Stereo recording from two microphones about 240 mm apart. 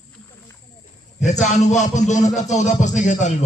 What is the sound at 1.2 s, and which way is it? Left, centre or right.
Music, left.